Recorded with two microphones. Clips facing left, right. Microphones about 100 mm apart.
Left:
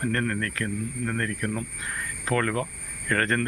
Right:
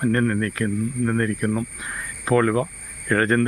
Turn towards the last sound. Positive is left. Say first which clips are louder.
# right 6 dB
turn(degrees=-15)  # may be behind; listen again after turning